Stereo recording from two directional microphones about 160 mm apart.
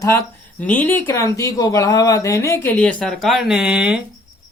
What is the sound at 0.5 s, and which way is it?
Speech, 10° left (ahead or behind).